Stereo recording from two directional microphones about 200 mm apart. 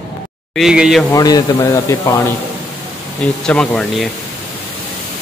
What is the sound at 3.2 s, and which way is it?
Speech, 5° left (ahead or behind).